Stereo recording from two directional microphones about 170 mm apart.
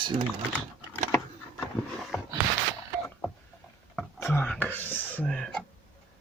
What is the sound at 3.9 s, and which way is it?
Whispering, 5° left (ahead or behind).